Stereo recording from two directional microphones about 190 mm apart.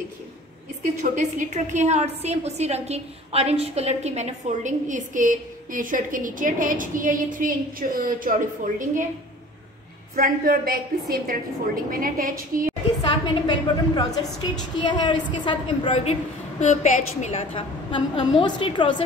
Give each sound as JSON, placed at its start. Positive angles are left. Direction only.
{"t": 1.1, "sound": "a woman's voice", "side_deg": -40}
{"t": 10.1, "sound": "a woman's voice", "side_deg": -45}
{"t": 13.1, "sound": "a woman's voice", "side_deg": 20}